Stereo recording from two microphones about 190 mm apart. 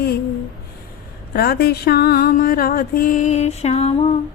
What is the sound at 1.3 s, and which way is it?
Mantra, 55° left (ahead or behind).